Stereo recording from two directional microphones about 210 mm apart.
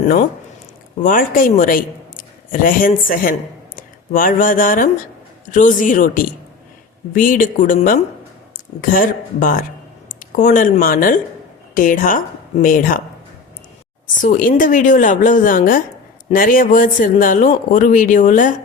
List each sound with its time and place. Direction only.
1.0 s a man's voice: 40° left (ahead or behind)
14.2 s a man's voice: 40° left (ahead or behind)